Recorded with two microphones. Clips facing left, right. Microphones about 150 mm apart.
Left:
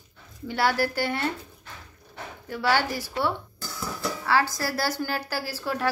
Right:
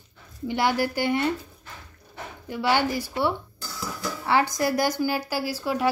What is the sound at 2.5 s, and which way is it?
A woman's voice, 15° right (ahead or behind).